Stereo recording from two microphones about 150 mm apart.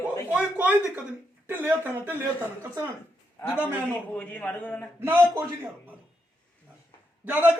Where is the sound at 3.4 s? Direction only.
15° left (ahead or behind).